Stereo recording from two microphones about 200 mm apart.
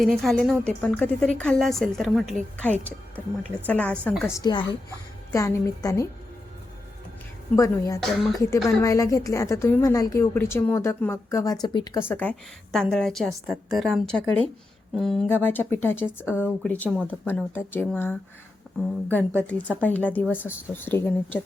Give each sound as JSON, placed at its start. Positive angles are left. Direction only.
{"t": 0.2, "sound": "a woman's voice", "side_deg": 0}
{"t": 4.4, "sound": "a woman's voice", "side_deg": 20}
{"t": 7.5, "sound": "a woman's voice", "side_deg": 15}